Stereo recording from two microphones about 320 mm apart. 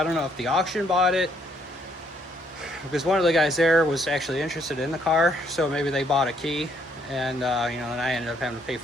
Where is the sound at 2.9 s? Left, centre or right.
Centre.